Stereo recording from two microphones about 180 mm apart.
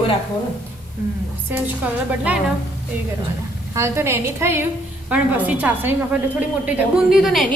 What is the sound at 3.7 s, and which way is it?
A woman's voice, 15° right (ahead or behind).